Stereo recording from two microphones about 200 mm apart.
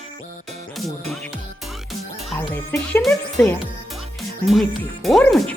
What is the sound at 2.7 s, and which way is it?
Speech, 5° left (ahead or behind).